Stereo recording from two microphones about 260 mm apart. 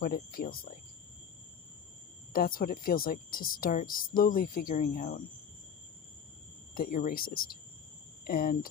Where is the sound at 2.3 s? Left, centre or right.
Left.